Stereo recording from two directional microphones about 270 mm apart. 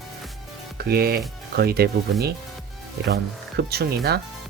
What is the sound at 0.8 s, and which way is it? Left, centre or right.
Speech, right.